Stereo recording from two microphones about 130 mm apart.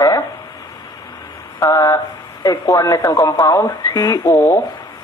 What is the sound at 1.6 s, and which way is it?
A man's voice, 25° left (ahead or behind).